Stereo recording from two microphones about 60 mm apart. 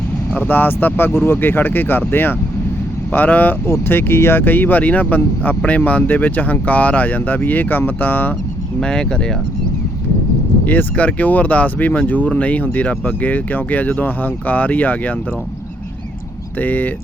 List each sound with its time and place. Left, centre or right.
0.3 s speech: left
8.8 s speech: centre
10.7 s speech: left
16.6 s speech: left